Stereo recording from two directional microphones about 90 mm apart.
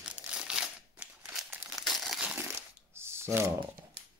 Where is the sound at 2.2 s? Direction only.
15° right (ahead or behind).